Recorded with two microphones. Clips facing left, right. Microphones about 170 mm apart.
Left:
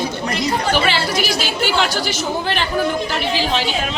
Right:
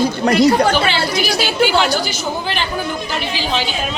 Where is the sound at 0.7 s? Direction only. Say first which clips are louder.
Right 1 dB; 5° left (ahead or behind).